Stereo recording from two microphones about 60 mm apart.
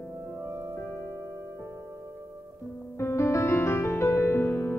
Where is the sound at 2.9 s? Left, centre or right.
Left.